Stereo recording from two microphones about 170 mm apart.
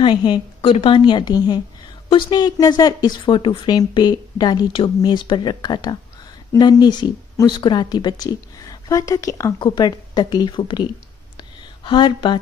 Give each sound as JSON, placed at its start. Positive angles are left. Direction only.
{"t": 0.0, "sound": "speech", "side_deg": 30}